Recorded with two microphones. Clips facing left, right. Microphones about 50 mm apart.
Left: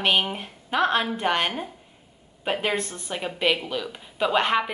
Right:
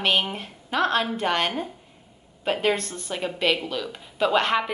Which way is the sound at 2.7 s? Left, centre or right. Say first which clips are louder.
Left 2 dB; left.